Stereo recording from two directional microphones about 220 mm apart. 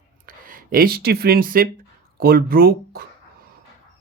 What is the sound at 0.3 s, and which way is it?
Speech, 40° right (ahead or behind).